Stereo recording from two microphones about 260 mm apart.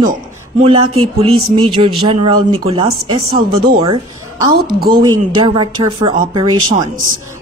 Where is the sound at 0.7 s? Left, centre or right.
Centre.